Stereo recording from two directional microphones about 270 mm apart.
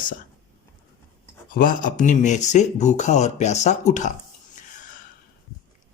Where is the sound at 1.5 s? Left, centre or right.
Left.